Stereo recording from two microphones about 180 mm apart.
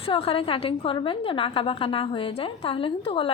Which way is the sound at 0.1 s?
30° left (ahead or behind).